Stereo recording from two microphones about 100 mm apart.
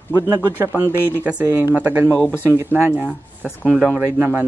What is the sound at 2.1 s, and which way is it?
Speech, 20° left (ahead or behind).